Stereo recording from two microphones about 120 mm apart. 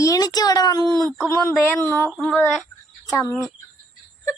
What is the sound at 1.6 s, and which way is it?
Speech, 15° left (ahead or behind).